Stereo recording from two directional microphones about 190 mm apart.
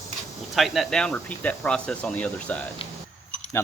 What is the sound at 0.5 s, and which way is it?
Speech, centre (ahead or behind).